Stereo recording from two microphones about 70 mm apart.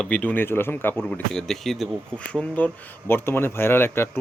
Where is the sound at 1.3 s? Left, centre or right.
Centre.